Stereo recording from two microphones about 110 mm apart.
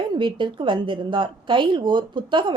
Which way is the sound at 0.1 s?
45° right (ahead or behind).